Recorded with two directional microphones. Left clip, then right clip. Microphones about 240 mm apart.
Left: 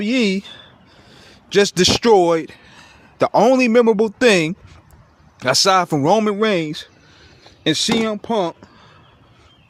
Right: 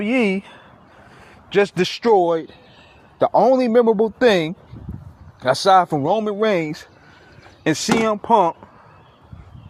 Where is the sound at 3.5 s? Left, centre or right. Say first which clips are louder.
Left 1 dB; left.